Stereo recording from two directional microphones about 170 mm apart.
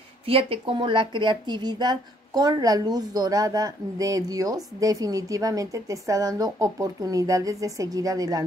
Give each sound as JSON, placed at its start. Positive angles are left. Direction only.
{"t": 0.3, "sound": "speech", "side_deg": -30}